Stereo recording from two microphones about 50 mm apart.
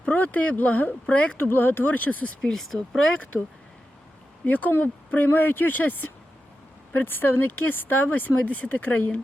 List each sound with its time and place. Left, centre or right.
0.0 s speech: left
1.4 s speech: left
2.4 s speech: centre
4.4 s speech: left
8.4 s speech: left